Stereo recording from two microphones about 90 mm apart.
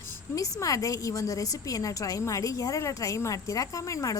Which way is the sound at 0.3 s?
40° left (ahead or behind).